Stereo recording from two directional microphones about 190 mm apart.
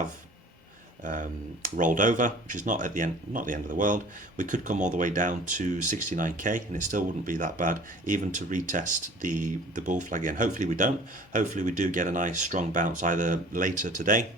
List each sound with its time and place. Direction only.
1.0 s speech: 45° right (ahead or behind)